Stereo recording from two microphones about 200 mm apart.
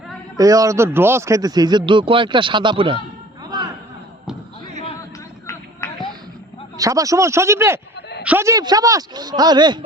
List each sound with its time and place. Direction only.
0.3 s a man's voice: 15° right (ahead or behind)
5.5 s a sound: 15° left (ahead or behind)
6.7 s a man's voice: 15° right (ahead or behind)